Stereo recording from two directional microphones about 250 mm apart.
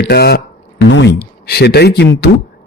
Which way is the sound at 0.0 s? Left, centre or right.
Left.